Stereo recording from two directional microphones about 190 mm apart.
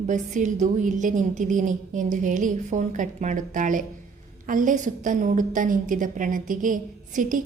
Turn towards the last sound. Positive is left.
turn(degrees=-45)  # may be behind; listen again after turning